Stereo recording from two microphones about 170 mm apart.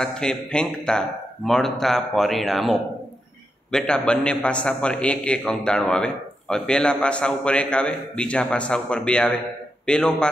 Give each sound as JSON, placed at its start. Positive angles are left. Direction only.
{"t": 0.0, "sound": "a man's voice", "side_deg": 5}